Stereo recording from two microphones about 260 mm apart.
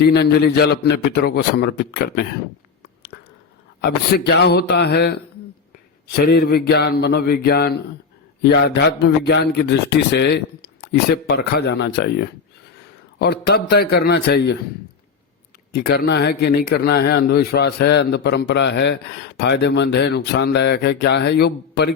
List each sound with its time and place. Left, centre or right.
0.0 s a man's voice: left
3.8 s a man's voice: left
15.7 s a man's voice: left